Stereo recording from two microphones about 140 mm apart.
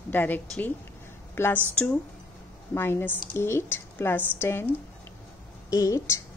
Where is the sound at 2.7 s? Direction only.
15° left (ahead or behind).